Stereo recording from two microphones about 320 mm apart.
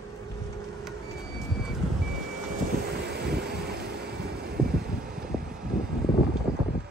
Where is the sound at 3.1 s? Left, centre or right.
Right.